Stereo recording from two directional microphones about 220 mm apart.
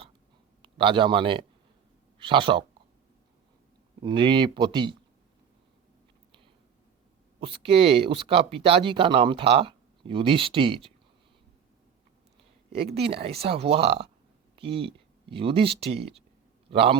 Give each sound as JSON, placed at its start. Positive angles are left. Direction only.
{"t": 0.6, "sound": "a man's voice", "side_deg": -25}
{"t": 4.0, "sound": "speech", "side_deg": -20}
{"t": 7.3, "sound": "speech", "side_deg": -25}
{"t": 12.7, "sound": "speech", "side_deg": -25}